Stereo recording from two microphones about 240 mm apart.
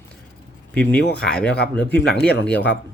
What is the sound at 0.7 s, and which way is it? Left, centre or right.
Speech, centre.